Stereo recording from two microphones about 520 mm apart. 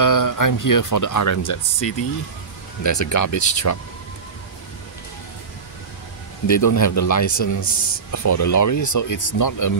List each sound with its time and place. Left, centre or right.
0.0 s speech: left
2.8 s speech: left
6.4 s speech: left